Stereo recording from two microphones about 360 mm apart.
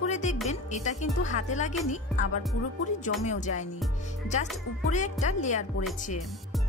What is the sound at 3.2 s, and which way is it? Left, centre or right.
Speech, centre.